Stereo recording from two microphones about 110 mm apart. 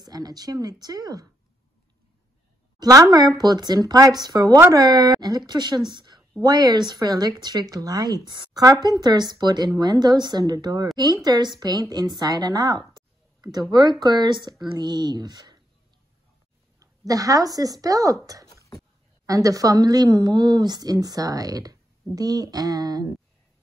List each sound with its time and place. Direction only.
0.0 s speech: 35° right (ahead or behind)
2.8 s speech: 35° right (ahead or behind)
16.8 s speech: 30° right (ahead or behind)
18.5 s a sound: 35° left (ahead or behind)
19.2 s speech: 30° right (ahead or behind)